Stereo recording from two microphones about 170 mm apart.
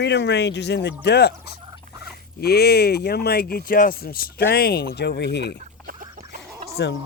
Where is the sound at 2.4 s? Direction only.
70° left (ahead or behind).